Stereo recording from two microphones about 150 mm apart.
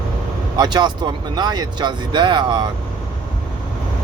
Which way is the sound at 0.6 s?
30° right (ahead or behind).